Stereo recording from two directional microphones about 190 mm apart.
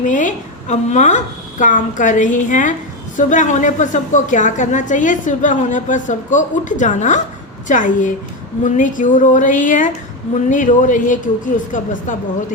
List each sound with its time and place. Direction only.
0.0 s a woman's voice: 40° left (ahead or behind)